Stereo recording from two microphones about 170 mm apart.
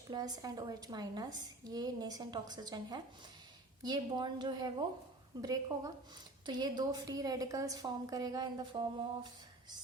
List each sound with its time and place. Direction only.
0.1 s a woman's voice: 20° right (ahead or behind)